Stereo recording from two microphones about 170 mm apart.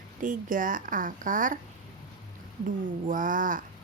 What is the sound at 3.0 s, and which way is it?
Speech, 50° right (ahead or behind).